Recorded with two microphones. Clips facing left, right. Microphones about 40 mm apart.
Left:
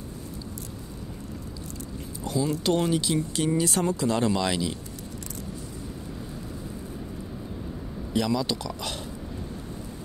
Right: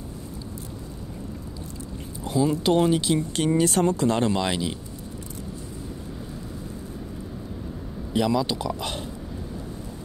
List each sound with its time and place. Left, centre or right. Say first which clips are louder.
2.2 s speech: right 4 dB; right
3.2 s speech: right 3 dB; right; by 4.7 s centre
8.1 s speech: right 3 dB; centre